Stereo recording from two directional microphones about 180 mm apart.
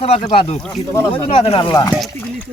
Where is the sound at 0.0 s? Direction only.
30° left (ahead or behind).